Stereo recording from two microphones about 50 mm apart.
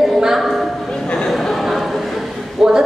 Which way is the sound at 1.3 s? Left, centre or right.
Centre.